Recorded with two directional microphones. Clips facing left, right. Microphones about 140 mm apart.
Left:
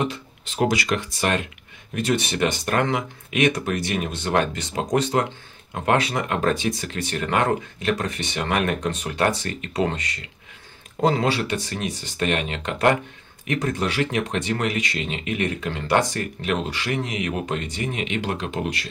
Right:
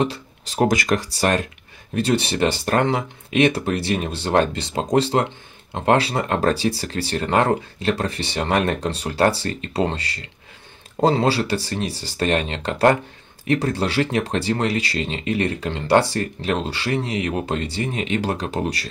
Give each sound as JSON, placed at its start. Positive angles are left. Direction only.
{"t": 0.0, "sound": "speech", "side_deg": -35}